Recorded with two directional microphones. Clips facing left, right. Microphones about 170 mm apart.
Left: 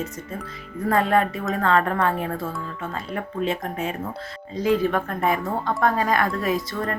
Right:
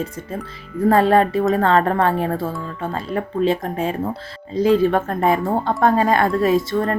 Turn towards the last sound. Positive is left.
turn(degrees=-25)  # may be behind; listen again after turning